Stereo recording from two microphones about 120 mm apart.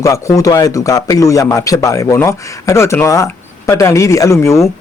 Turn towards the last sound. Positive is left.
turn(degrees=25)  # may be behind; listen again after turning